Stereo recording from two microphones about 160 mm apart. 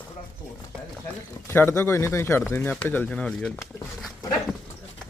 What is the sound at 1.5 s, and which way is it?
Speech, 15° left (ahead or behind).